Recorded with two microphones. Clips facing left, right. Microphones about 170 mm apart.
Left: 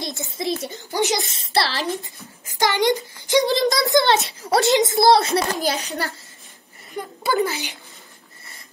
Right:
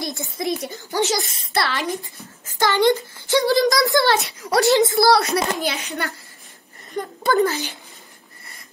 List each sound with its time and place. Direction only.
0.0 s a woman's voice: 20° left (ahead or behind)
2.4 s a child's voice: 15° left (ahead or behind)
5.5 s a child's voice: 40° left (ahead or behind)
7.0 s speech: 10° left (ahead or behind)